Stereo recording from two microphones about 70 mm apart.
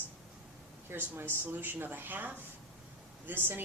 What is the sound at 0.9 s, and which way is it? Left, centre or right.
A woman's voice, right.